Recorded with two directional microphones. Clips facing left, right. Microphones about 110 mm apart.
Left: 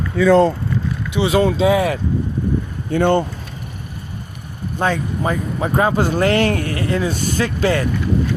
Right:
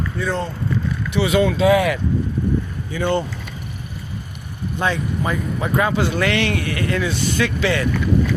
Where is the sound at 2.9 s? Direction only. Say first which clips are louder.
Left 5 dB; 55° left (ahead or behind).